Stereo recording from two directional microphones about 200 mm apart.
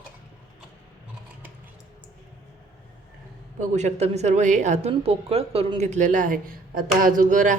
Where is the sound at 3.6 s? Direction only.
35° right (ahead or behind).